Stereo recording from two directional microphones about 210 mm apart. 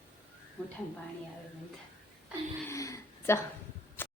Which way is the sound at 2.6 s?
15° left (ahead or behind).